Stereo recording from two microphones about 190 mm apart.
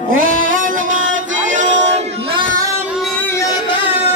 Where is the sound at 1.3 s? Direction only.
40° right (ahead or behind).